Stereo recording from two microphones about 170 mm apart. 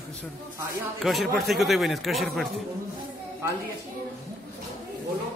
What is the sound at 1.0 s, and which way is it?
Speech, centre (ahead or behind).